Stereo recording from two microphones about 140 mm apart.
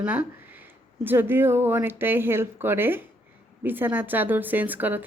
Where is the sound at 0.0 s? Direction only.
10° right (ahead or behind).